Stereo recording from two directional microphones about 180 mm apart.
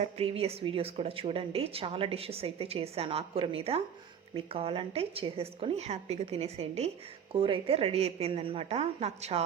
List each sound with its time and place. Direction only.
0.0 s speech: 35° right (ahead or behind)